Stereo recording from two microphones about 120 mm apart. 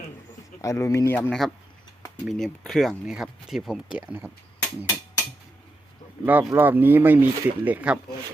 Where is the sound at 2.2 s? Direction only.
5° left (ahead or behind); by 4.3 s 15° right (ahead or behind).